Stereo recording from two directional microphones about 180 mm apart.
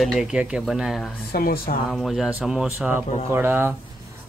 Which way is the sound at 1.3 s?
55° left (ahead or behind).